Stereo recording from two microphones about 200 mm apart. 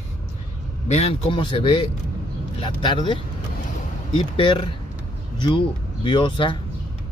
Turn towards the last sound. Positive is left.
turn(degrees=25)  # may be behind; listen again after turning